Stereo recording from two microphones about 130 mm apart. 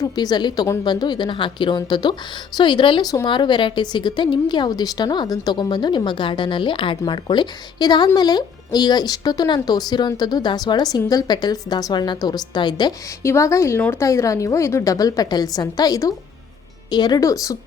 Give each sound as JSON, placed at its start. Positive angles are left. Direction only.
{"t": 0.0, "sound": "speech", "side_deg": 30}
{"t": 13.2, "sound": "a woman's voice", "side_deg": 20}